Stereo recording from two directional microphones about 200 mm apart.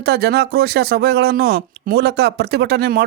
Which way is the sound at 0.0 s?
55° right (ahead or behind).